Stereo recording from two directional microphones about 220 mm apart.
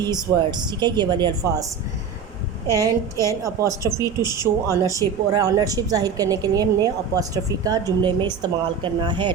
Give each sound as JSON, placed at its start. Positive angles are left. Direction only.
{"t": 0.0, "sound": "a woman's voice", "side_deg": -20}
{"t": 2.7, "sound": "a woman's voice", "side_deg": -15}